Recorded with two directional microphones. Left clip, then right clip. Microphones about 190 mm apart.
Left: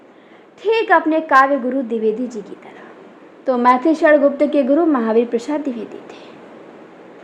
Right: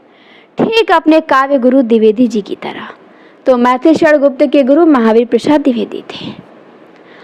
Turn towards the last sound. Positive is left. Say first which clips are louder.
# right 11 dB
turn(degrees=-35)  # may be behind; listen again after turning